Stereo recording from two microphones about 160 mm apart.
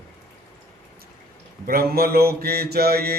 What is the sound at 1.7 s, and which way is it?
Mantra, 70° right (ahead or behind).